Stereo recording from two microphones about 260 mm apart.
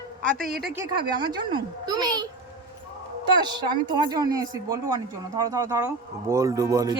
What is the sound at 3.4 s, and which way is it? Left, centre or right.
Speech, centre.